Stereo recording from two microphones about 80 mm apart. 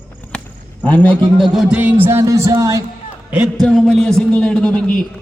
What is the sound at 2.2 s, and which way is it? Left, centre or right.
Speech, right.